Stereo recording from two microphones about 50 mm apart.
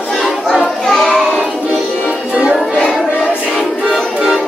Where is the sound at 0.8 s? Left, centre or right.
Centre.